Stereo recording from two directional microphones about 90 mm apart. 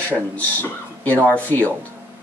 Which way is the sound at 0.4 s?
20° left (ahead or behind).